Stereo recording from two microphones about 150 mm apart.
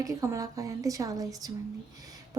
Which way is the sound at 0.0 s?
20° right (ahead or behind).